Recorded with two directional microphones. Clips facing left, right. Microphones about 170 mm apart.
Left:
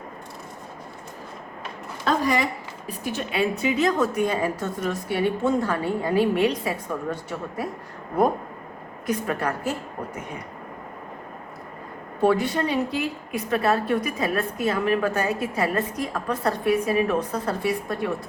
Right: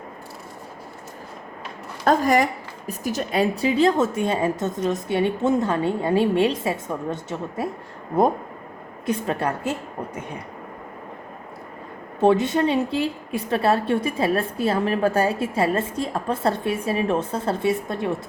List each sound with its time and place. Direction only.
2.0 s a woman's voice: 45° right (ahead or behind); by 7.7 s 25° right (ahead or behind)
9.0 s a woman's voice: 25° right (ahead or behind)
12.2 s a woman's voice: 25° right (ahead or behind)